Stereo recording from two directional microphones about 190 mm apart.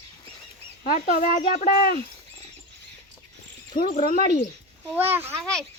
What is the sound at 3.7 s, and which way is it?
Speech, 45° left (ahead or behind).